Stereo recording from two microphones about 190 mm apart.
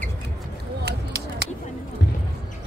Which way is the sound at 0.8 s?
60° right (ahead or behind).